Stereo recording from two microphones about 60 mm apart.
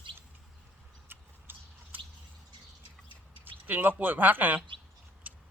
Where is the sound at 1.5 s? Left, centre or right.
Right.